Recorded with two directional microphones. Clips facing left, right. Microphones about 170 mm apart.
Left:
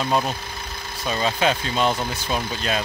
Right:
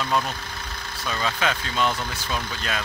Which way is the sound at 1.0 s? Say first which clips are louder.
Left 4 dB; 25° left (ahead or behind).